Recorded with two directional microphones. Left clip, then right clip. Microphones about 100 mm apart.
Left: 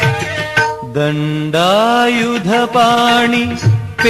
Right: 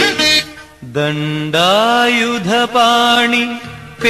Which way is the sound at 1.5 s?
35° left (ahead or behind).